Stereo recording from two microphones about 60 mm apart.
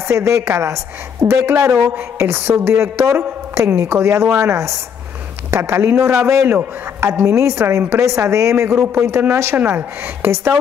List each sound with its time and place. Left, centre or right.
0.1 s a woman's voice: right
3.7 s a woman's voice: right
4.1 s a woman's voice: right
8.0 s a woman's voice: right
9.6 s a woman's voice: right
10.2 s a woman's voice: right